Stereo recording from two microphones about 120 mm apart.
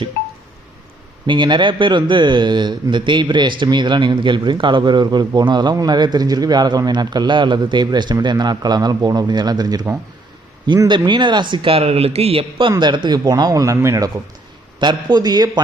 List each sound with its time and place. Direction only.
1.3 s a man's voice: 40° right (ahead or behind)
10.8 s a man's voice: 40° right (ahead or behind)
14.8 s a man's voice: 35° right (ahead or behind)